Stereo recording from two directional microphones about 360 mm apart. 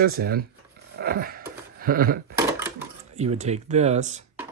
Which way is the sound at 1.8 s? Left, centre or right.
Right.